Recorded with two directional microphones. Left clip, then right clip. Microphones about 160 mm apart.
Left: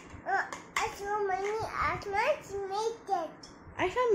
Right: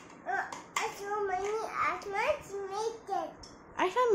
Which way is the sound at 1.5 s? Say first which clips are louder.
Even; 20° right (ahead or behind).